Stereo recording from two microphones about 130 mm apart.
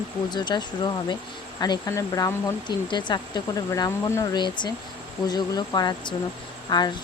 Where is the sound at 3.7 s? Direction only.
25° left (ahead or behind).